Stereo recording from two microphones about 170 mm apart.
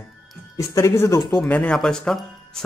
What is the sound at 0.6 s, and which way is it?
Speech, 15° left (ahead or behind).